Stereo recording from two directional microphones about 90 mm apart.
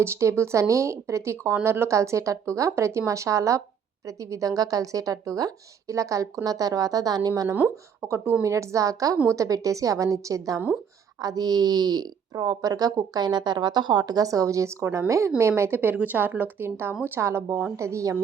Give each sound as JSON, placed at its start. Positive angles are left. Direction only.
{"t": 0.0, "sound": "a woman's voice", "side_deg": -30}
{"t": 8.0, "sound": "a woman's voice", "side_deg": -30}